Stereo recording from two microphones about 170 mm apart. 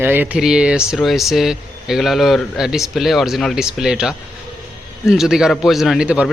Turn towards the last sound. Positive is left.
turn(degrees=-5)  # may be behind; listen again after turning